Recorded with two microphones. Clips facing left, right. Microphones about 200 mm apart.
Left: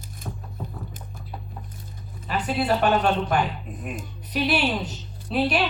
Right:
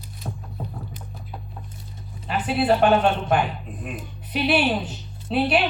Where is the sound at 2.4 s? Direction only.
40° left (ahead or behind).